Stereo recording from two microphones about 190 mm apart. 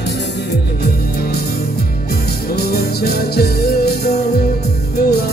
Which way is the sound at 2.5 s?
55° left (ahead or behind).